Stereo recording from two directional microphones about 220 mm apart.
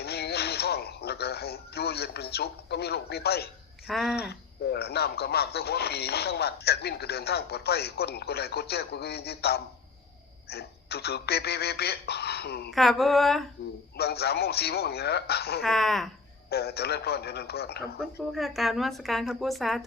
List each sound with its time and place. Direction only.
0.0 s a sound: 45° left (ahead or behind)
3.8 s a woman's voice: centre (ahead or behind)
4.2 s speech: 45° left (ahead or behind)
12.7 s a woman's voice: centre (ahead or behind)
13.9 s speech: 45° left (ahead or behind)
15.6 s a woman's voice: centre (ahead or behind)
16.5 s speech: 45° left (ahead or behind)
18.0 s a woman's voice: centre (ahead or behind)